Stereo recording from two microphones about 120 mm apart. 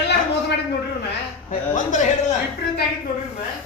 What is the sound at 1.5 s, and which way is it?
Speech, 90° left.